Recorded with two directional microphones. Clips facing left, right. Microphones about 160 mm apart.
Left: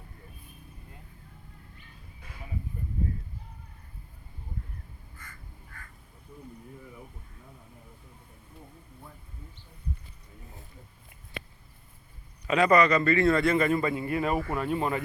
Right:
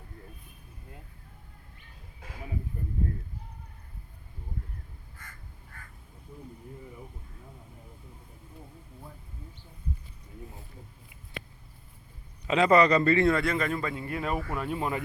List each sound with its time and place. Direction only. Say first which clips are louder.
12.5 s speech: even; 20° right (ahead or behind)
13.3 s speech: left 4 dB; centre (ahead or behind)